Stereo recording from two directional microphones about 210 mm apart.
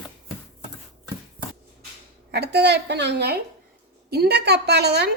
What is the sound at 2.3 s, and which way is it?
A woman's voice, 50° right (ahead or behind).